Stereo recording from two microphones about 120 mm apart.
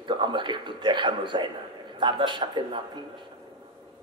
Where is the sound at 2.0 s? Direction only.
40° right (ahead or behind).